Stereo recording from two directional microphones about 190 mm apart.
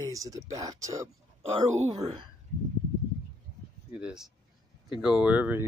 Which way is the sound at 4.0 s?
5° right (ahead or behind).